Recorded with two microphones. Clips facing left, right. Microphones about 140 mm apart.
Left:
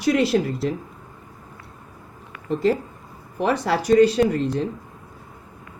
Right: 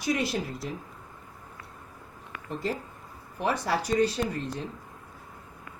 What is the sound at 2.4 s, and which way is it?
Speech, 80° left.